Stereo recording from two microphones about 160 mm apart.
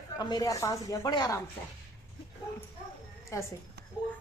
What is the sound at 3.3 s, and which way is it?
Speech, 20° left (ahead or behind).